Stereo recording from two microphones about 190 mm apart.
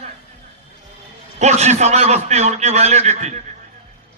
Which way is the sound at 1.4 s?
35° right (ahead or behind).